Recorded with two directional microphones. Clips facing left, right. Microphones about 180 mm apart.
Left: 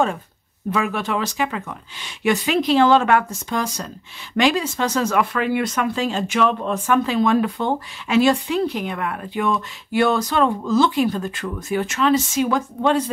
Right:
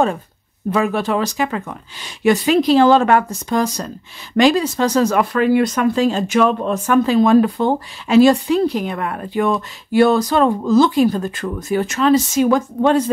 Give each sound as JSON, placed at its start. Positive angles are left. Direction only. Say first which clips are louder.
{"t": 0.7, "sound": "speech", "louder": "right 5 dB", "side_deg": -35}